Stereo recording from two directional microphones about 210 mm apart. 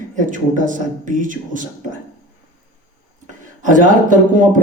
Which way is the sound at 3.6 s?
40° right (ahead or behind).